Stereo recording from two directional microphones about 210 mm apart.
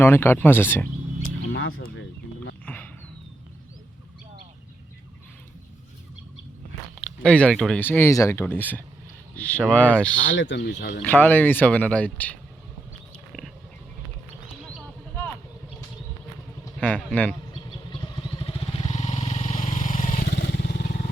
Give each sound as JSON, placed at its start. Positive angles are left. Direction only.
{"t": 0.0, "sound": "speech", "side_deg": 10}
{"t": 1.2, "sound": "a sound", "side_deg": 70}
{"t": 2.6, "sound": "a sound", "side_deg": 5}
{"t": 6.9, "sound": "speech", "side_deg": 5}
{"t": 10.2, "sound": "speech", "side_deg": 60}
{"t": 11.0, "sound": "speech", "side_deg": 10}
{"t": 16.8, "sound": "a man's voice", "side_deg": 5}
{"t": 17.9, "sound": "vehicle", "side_deg": 20}
{"t": 20.5, "sound": "vehicle", "side_deg": 50}